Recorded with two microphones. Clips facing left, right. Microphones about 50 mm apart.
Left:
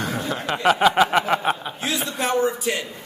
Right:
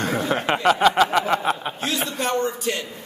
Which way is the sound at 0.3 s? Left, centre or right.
Right.